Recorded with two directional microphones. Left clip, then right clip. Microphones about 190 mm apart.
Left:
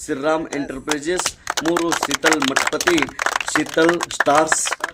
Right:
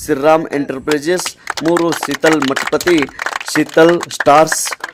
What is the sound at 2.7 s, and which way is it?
A man's voice, 40° right (ahead or behind).